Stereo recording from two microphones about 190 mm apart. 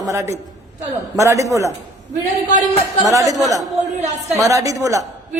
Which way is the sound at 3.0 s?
15° right (ahead or behind).